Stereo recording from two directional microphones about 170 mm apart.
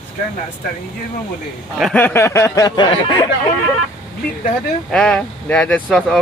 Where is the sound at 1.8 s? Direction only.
5° left (ahead or behind); by 3.2 s 25° left (ahead or behind).